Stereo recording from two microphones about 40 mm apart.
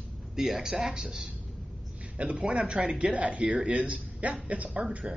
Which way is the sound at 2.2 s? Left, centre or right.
Right.